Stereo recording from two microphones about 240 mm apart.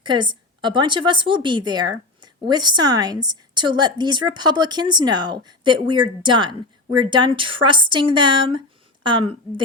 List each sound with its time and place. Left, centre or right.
0.0 s a woman's voice: centre